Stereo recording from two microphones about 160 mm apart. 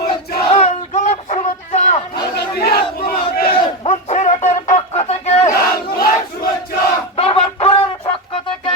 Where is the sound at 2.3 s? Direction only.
75° left (ahead or behind).